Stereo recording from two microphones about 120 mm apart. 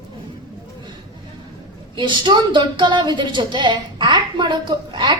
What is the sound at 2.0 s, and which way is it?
A woman's voice, 40° right (ahead or behind).